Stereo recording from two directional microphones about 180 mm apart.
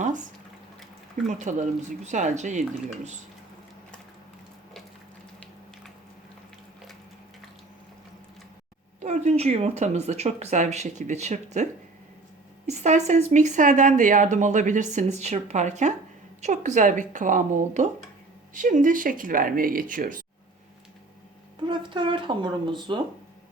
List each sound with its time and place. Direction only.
1.3 s speech: 45° right (ahead or behind)
9.0 s speech: 40° right (ahead or behind)
21.7 s speech: 25° right (ahead or behind)